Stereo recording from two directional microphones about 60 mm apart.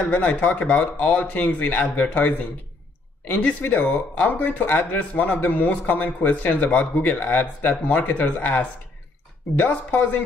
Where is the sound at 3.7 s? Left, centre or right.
Left.